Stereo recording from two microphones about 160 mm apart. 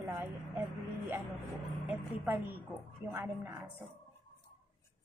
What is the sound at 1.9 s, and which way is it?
A woman's voice, 10° right (ahead or behind).